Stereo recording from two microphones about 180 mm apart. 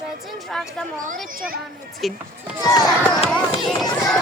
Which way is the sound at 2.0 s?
Centre (ahead or behind).